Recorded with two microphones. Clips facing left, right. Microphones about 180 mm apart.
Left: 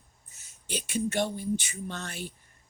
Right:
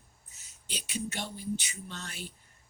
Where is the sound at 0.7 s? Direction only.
50° left (ahead or behind).